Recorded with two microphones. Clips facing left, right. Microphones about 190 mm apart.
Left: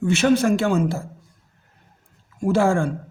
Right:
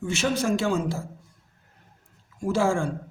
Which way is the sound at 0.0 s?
60° left (ahead or behind).